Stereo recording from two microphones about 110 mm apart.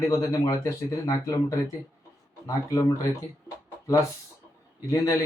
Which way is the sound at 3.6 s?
30° left (ahead or behind).